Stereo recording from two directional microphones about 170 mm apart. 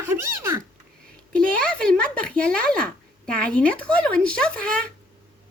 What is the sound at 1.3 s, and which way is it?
Speech, 5° left (ahead or behind).